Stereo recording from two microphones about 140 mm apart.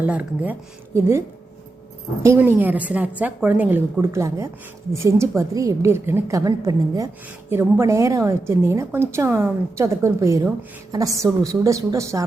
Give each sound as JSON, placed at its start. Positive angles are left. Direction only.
{"t": 0.0, "sound": "a woman's voice", "side_deg": -10}
{"t": 2.2, "sound": "a woman's voice", "side_deg": -20}